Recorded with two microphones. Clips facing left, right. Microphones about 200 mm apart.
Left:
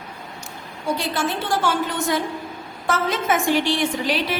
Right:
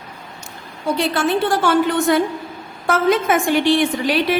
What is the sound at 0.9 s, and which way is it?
A woman's voice, 60° right (ahead or behind).